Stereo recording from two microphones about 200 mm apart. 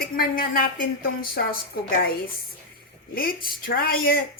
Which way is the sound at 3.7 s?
50° left (ahead or behind).